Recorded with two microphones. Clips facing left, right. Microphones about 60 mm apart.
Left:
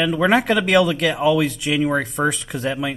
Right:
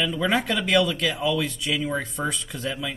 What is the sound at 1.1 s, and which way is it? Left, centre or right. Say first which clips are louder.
Speech: left 7 dB; left.